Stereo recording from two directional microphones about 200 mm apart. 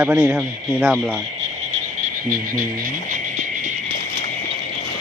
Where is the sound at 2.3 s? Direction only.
45° right (ahead or behind).